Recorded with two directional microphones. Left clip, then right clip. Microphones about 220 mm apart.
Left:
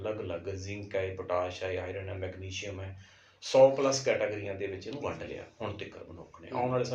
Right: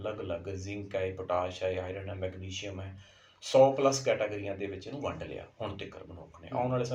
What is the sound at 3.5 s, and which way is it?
Speech, 35° right (ahead or behind).